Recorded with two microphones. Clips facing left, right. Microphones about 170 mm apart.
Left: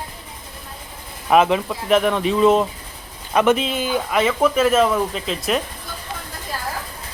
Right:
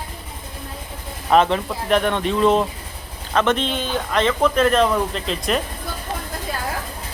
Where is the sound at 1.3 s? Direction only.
5° left (ahead or behind).